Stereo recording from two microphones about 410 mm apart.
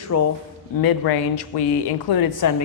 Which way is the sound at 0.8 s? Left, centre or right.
Left.